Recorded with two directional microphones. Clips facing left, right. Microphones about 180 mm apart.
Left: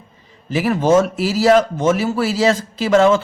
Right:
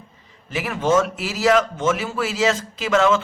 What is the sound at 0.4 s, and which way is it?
A man's voice, 35° left (ahead or behind).